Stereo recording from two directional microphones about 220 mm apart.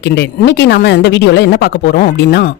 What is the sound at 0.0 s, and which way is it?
Speech, 50° left (ahead or behind).